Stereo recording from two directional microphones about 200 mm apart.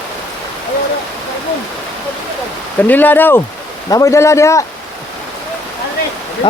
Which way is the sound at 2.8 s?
10° left (ahead or behind).